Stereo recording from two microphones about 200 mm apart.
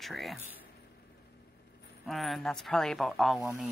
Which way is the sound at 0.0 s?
Centre (ahead or behind).